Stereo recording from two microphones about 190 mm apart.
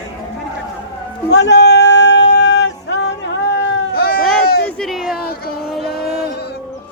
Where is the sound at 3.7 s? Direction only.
55° left (ahead or behind).